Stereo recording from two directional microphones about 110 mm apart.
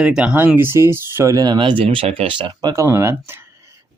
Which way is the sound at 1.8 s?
60° right (ahead or behind).